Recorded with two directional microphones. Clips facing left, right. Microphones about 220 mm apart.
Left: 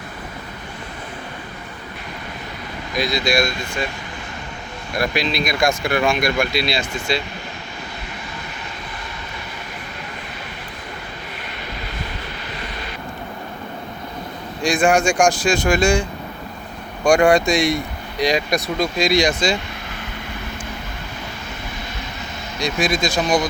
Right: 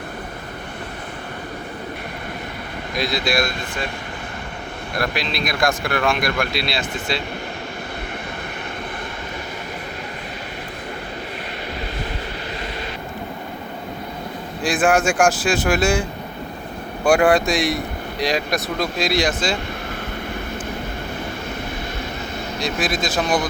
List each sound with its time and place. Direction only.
2.9 s speech: centre (ahead or behind)
4.9 s speech: centre (ahead or behind)
14.6 s speech: 5° right (ahead or behind)
22.6 s speech: 5° right (ahead or behind)